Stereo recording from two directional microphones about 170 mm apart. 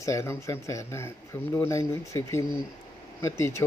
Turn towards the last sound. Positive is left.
turn(degrees=15)  # may be behind; listen again after turning